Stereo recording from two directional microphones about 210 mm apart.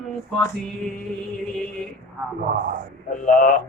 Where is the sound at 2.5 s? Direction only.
40° right (ahead or behind).